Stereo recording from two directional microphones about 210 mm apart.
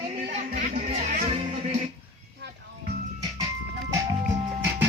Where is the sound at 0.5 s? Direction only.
35° right (ahead or behind).